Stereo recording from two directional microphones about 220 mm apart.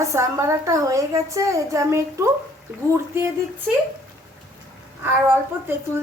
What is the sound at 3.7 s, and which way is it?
Speech, centre (ahead or behind).